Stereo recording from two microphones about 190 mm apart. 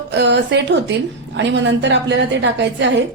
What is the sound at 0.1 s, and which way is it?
A woman's voice, 65° right (ahead or behind).